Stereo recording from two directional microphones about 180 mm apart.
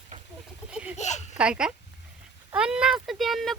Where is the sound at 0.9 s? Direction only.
40° left (ahead or behind).